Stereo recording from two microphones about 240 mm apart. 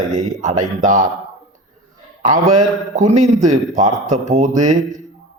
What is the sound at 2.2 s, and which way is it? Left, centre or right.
A man's voice, right.